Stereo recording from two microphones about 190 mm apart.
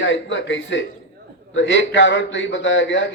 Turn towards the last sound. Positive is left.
turn(degrees=70)  # may be behind; listen again after turning